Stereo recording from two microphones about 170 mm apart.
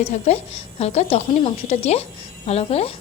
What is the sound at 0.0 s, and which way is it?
A woman's voice, 40° left (ahead or behind).